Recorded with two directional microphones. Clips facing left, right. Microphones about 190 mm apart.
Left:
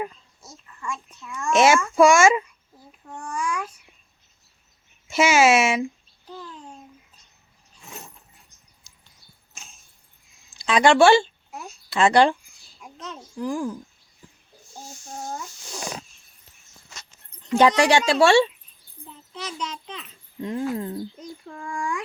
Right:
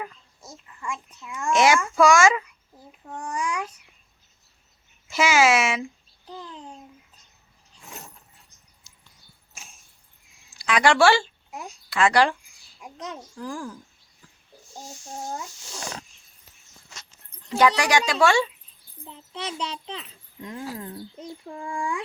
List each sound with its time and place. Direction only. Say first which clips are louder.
0.5 s a child's voice: left 1 dB; 15° right (ahead or behind)
1.5 s speech: left 3 dB; 25° left (ahead or behind)
3.2 s a sound: even; 20° right (ahead or behind)
5.0 s speech: left 2 dB; 25° left (ahead or behind)
10.7 s speech: left 3 dB; 25° left (ahead or behind)
11.5 s a sound: right 1 dB; 15° right (ahead or behind)
11.9 s speech: left 3 dB; 25° left (ahead or behind)
12.8 s a child's voice: right 2 dB; 15° right (ahead or behind)
13.3 s speech: left 10 dB; 15° left (ahead or behind)
15.7 s speech: left 3 dB; 10° left (ahead or behind)
17.6 s speech: left 3 dB; 30° left (ahead or behind)
19.3 s a child's voice: right 1 dB; 30° right (ahead or behind)
20.4 s speech: left 8 dB; 25° left (ahead or behind)
21.5 s a sound: even; 15° right (ahead or behind)